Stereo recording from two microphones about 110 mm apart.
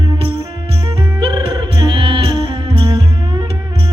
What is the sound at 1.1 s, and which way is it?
Music, 50° right (ahead or behind).